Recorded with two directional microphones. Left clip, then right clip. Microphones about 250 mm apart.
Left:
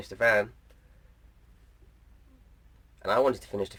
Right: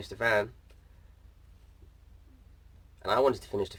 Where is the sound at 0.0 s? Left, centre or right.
Centre.